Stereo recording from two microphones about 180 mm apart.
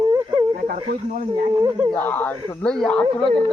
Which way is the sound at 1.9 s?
10° left (ahead or behind).